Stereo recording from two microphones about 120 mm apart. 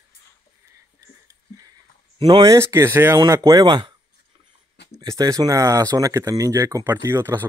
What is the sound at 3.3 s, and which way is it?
Speech, 30° right (ahead or behind).